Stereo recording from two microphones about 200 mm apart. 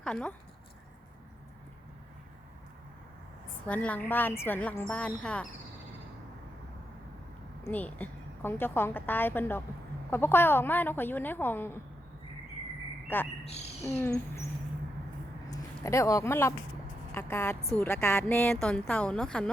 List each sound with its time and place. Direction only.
0.0 s speech: 5° left (ahead or behind)
3.7 s a woman's voice: 5° left (ahead or behind)
7.6 s a woman's voice: 10° left (ahead or behind)
13.4 s speech: 30° left (ahead or behind)
13.8 s a woman's voice: 10° left (ahead or behind)
15.4 s a woman's voice: 15° left (ahead or behind)